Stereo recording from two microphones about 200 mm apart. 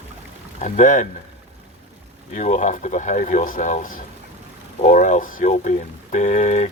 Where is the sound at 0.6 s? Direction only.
40° left (ahead or behind).